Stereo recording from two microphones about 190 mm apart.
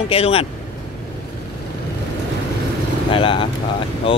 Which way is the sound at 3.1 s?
25° left (ahead or behind).